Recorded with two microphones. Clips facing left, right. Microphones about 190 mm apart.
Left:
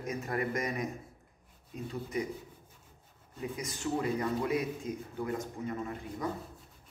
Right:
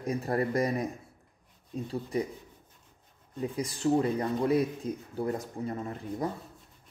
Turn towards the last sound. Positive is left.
turn(degrees=-35)  # may be behind; listen again after turning